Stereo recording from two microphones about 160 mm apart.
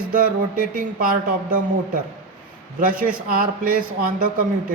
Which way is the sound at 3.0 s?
60° right (ahead or behind).